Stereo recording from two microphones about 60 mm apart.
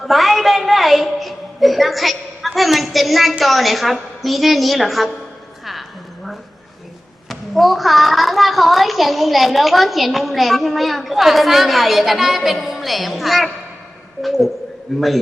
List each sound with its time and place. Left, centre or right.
0.0 s a woman's voice: centre
7.3 s a child's voice: centre